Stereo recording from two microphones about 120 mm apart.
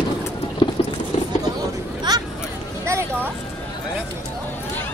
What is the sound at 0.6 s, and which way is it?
Clip-clop, 45° left (ahead or behind).